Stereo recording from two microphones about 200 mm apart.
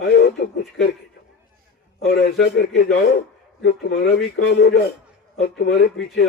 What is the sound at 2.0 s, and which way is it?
Speech, 50° left (ahead or behind).